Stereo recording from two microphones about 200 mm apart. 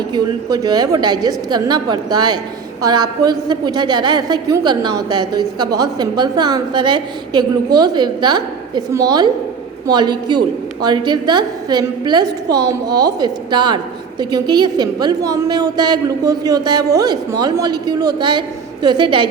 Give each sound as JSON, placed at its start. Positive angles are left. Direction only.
{"t": 0.1, "sound": "a woman's voice", "side_deg": -20}